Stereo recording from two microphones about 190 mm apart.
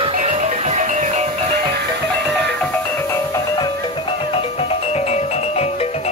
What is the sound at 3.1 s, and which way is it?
Music, 20° left (ahead or behind).